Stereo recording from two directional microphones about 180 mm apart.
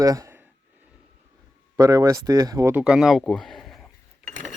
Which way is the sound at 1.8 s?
20° right (ahead or behind).